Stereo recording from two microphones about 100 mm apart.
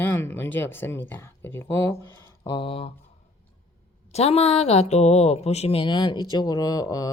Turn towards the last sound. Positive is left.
turn(degrees=35)  # may be behind; listen again after turning